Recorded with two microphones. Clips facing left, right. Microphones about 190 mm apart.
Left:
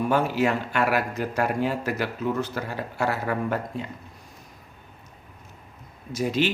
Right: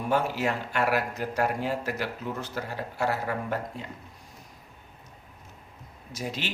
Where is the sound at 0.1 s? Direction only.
80° left.